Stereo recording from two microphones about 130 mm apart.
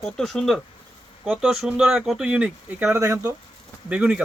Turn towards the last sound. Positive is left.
turn(degrees=-10)  # may be behind; listen again after turning